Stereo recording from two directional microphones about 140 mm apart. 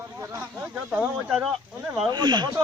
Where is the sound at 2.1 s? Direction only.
30° right (ahead or behind).